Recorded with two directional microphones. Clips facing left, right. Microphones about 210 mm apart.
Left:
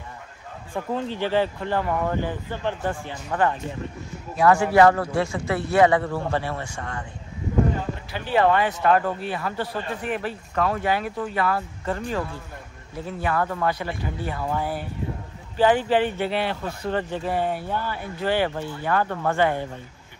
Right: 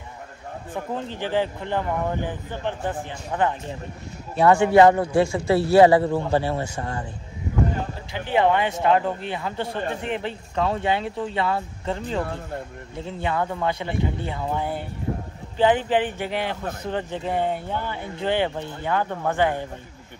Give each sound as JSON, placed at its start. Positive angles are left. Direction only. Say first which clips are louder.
{"t": 0.9, "sound": "speech", "louder": "left 2 dB", "side_deg": -15}
{"t": 4.4, "sound": "speech", "louder": "right 2 dB", "side_deg": -30}
{"t": 8.3, "sound": "speech", "louder": "even", "side_deg": -20}